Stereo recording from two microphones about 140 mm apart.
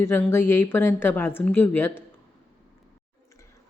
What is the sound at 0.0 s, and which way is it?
A woman's voice, 15° left (ahead or behind).